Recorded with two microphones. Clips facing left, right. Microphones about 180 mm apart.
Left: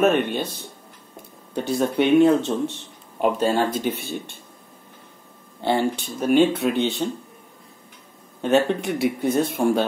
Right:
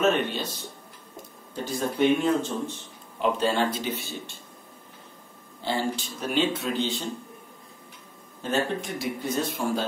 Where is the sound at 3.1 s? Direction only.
50° left (ahead or behind).